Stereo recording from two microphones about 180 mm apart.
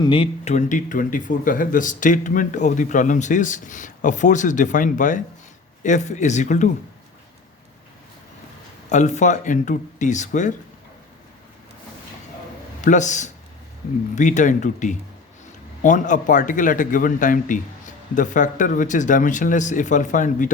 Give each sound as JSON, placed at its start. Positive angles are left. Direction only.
{"t": 0.0, "sound": "speech", "side_deg": 30}
{"t": 0.5, "sound": "speech", "side_deg": 45}
{"t": 8.9, "sound": "speech", "side_deg": 40}
{"t": 12.8, "sound": "speech", "side_deg": 45}